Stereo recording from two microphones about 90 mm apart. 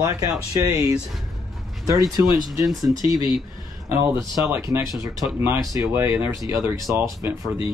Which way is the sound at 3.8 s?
30° right (ahead or behind).